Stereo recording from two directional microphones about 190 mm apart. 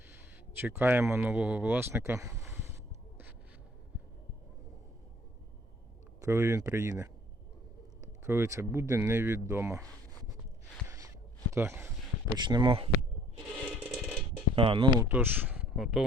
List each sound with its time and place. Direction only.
0.6 s speech: 10° right (ahead or behind)
6.2 s speech: 15° right (ahead or behind)
8.3 s speech: 15° right (ahead or behind)
10.8 s a sound: 15° right (ahead or behind)
11.5 s speech: 15° right (ahead or behind)
13.7 s coin: 5° right (ahead or behind)
14.5 s speech: 30° right (ahead or behind)
15.1 s speech: 10° right (ahead or behind)